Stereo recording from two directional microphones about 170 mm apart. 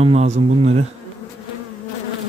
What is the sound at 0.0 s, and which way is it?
Speech, 40° right (ahead or behind).